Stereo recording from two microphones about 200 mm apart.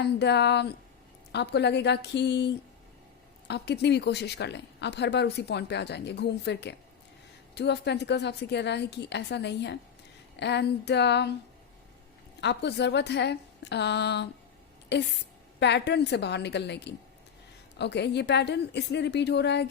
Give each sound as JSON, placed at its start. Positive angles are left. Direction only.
{"t": 0.0, "sound": "speech", "side_deg": 55}
{"t": 12.4, "sound": "speech", "side_deg": 60}